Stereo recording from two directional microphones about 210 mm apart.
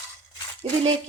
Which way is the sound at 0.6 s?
25° right (ahead or behind).